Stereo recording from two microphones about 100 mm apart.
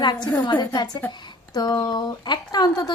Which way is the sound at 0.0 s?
45° left (ahead or behind).